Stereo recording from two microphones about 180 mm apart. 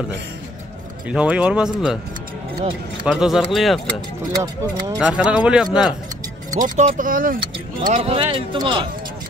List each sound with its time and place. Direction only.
1.0 s speech: 5° right (ahead or behind)
3.1 s speech: centre (ahead or behind)
4.3 s speech: 20° right (ahead or behind)
4.9 s speech: 5° right (ahead or behind)
6.5 s speech: 45° right (ahead or behind)
7.8 s speech: 35° right (ahead or behind)